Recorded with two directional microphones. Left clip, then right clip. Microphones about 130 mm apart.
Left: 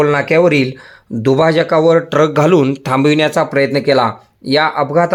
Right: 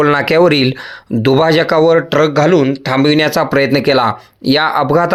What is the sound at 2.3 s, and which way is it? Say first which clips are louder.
Speech: right 1 dB; 25° left (ahead or behind).